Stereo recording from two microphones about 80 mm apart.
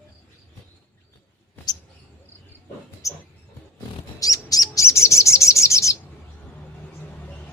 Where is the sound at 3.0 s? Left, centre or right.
Left.